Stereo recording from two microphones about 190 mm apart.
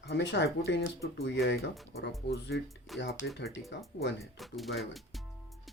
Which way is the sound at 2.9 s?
Centre (ahead or behind).